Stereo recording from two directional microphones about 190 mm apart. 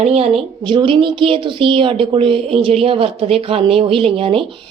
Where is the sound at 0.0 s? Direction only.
35° right (ahead or behind).